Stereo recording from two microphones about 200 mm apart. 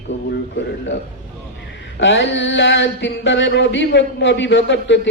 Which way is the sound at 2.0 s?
65° left (ahead or behind).